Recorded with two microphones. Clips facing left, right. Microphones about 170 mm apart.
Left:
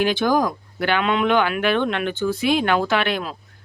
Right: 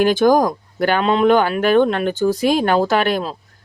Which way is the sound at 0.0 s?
45° right (ahead or behind).